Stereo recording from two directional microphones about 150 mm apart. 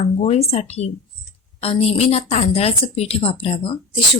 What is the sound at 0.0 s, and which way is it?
A woman's voice, 45° left (ahead or behind).